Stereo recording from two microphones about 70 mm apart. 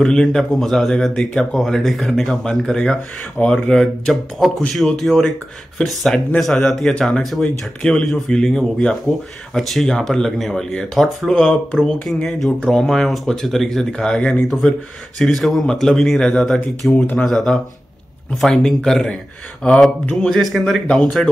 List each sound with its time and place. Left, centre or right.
0.0 s speech: centre
16.9 s speech: left
17.2 s speech: centre